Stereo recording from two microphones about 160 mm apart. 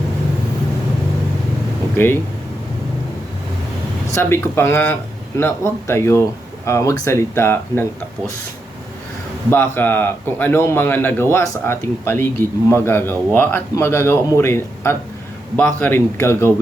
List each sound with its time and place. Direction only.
4.1 s a man's voice: 15° left (ahead or behind)
9.5 s a man's voice: 15° left (ahead or behind)